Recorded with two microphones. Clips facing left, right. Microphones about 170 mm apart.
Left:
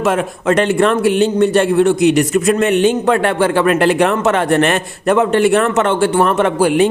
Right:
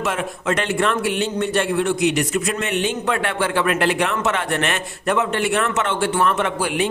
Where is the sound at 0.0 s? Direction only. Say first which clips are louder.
Left 8 dB; 45° left (ahead or behind).